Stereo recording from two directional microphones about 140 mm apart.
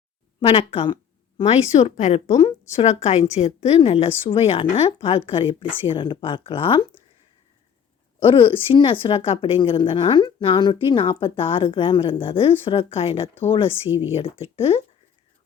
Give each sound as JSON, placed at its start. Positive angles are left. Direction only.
{"t": 0.3, "sound": "a woman's voice", "side_deg": 40}
{"t": 8.2, "sound": "a woman's voice", "side_deg": 40}